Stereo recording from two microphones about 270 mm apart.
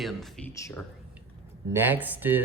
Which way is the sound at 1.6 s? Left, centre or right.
Centre.